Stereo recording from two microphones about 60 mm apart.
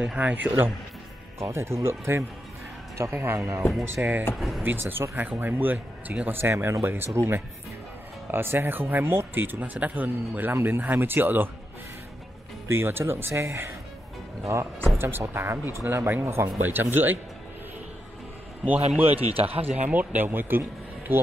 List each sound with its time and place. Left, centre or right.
0.0 s speech: right
1.4 s speech: right
4.4 s speech: centre
4.6 s speech: right
6.5 s speech: right
6.8 s speech: right
12.6 s speech: right
15.0 s speech: right
16.6 s speech: right
18.7 s speech: right